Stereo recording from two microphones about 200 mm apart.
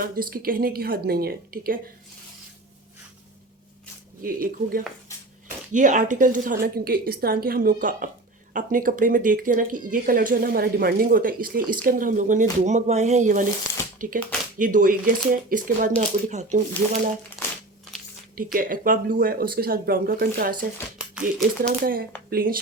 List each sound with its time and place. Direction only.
0.0 s speech: 45° right (ahead or behind)
4.2 s speech: 45° right (ahead or behind)
18.3 s speech: 45° right (ahead or behind)
21.7 s speech: 45° right (ahead or behind)